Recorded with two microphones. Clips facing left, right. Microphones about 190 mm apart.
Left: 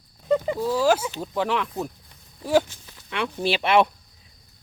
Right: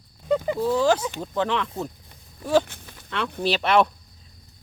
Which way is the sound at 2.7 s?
60° right (ahead or behind).